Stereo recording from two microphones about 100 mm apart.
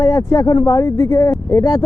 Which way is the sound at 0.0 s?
30° left (ahead or behind).